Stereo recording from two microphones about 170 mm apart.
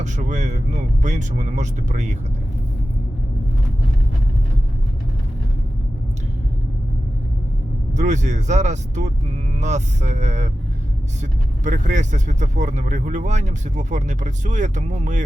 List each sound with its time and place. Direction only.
0.0 s speech: 45° right (ahead or behind)
7.9 s speech: 45° right (ahead or behind)